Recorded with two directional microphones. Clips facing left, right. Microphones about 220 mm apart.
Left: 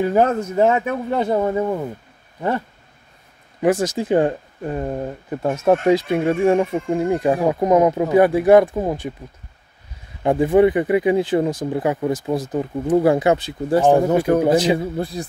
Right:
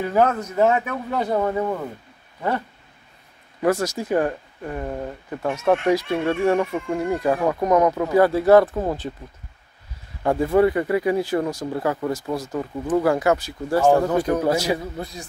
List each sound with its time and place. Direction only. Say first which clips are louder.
0.0 s speech: left 3 dB; 30° left (ahead or behind)
3.6 s speech: left 3 dB; 15° left (ahead or behind)
5.5 s speech: left 3 dB; 40° left (ahead or behind)
5.9 s speech: left 4 dB; 20° left (ahead or behind)
6.9 s speech: left 3 dB; 20° left (ahead or behind)
10.2 s speech: left 3 dB; 15° left (ahead or behind)
15.0 s speech: left 7 dB; 30° left (ahead or behind)